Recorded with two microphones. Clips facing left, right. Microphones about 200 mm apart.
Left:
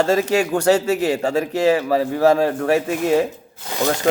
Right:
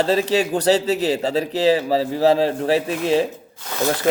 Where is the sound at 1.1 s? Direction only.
20° right (ahead or behind).